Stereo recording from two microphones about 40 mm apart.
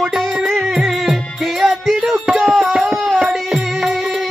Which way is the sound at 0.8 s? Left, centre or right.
Centre.